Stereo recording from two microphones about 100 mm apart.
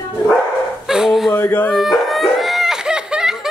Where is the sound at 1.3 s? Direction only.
20° left (ahead or behind).